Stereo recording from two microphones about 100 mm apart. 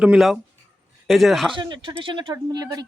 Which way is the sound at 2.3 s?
40° right (ahead or behind).